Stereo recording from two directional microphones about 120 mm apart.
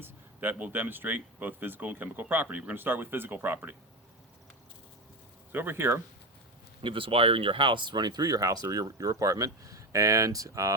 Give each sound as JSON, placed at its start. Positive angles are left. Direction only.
{"t": 0.0, "sound": "speech", "side_deg": -15}
{"t": 5.5, "sound": "speech", "side_deg": -15}
{"t": 6.8, "sound": "speech", "side_deg": -45}